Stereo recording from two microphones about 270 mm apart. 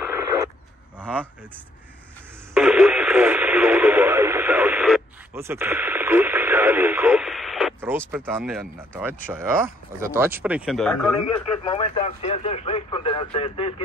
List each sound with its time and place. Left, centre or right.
0.0 s a sound: centre
2.5 s radio: centre
8.1 s speech: centre
11.7 s speech: left